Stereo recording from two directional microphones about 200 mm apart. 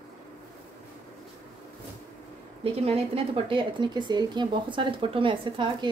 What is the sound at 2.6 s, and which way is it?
A woman's voice, 30° right (ahead or behind).